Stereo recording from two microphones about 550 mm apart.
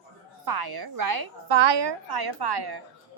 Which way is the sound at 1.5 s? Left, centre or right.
Right.